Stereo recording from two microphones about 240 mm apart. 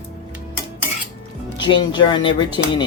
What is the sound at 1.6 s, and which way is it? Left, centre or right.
Speech, centre.